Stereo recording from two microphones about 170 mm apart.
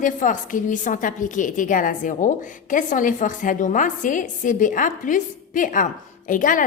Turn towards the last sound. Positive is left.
turn(degrees=50)  # may be behind; listen again after turning